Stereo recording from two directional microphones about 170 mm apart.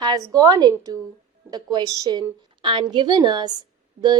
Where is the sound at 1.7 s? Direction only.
20° right (ahead or behind).